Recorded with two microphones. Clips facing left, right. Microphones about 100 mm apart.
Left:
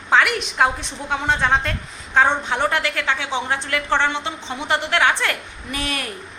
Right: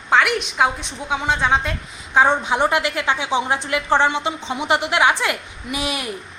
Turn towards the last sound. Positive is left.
turn(degrees=-10)  # may be behind; listen again after turning